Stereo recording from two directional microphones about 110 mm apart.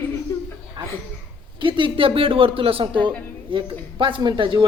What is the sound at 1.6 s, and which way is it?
A man's voice, 50° right (ahead or behind).